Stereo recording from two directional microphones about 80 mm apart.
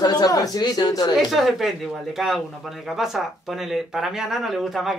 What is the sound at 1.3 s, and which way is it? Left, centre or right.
Speech, centre.